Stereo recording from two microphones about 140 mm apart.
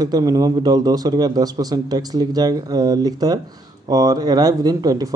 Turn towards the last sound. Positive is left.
turn(degrees=-25)  # may be behind; listen again after turning